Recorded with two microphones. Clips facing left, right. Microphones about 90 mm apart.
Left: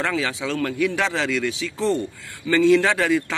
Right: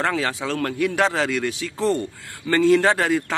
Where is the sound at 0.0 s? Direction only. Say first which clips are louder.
Right 1 dB; 45° right (ahead or behind).